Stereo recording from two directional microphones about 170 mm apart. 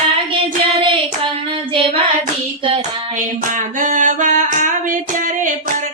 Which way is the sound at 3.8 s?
50° right (ahead or behind).